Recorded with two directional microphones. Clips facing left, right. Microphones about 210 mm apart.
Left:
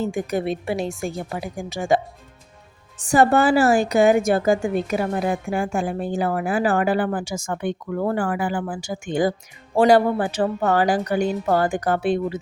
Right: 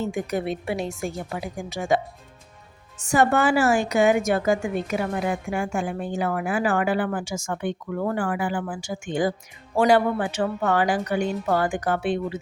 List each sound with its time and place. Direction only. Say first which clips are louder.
0.0 s a woman's voice: left 3 dB; 30° left (ahead or behind)
3.0 s a woman's voice: left 3 dB; 35° left (ahead or behind)